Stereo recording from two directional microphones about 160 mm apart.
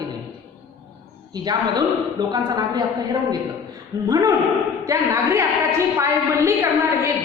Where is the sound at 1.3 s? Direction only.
25° right (ahead or behind).